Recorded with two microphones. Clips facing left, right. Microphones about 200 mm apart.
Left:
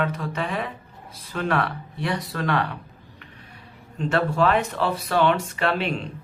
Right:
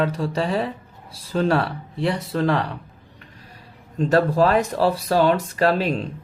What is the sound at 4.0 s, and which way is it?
Speech, 35° right (ahead or behind).